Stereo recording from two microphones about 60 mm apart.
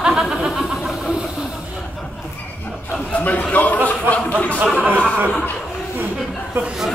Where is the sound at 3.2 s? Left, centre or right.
Left.